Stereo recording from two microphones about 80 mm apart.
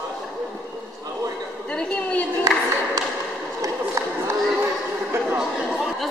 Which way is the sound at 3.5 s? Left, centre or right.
Right.